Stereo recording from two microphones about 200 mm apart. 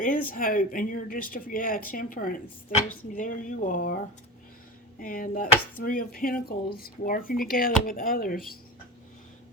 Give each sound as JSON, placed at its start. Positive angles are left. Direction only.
{"t": 0.0, "sound": "speech", "side_deg": 40}
{"t": 4.9, "sound": "speech", "side_deg": 45}